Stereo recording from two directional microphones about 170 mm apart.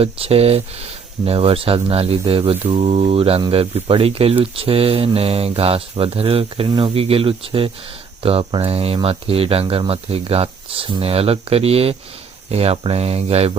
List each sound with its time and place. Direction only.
0.0 s speech: 35° right (ahead or behind)